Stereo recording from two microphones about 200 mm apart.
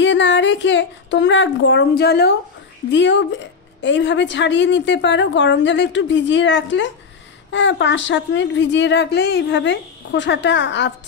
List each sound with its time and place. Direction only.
0.0 s a woman's voice: 65° left (ahead or behind)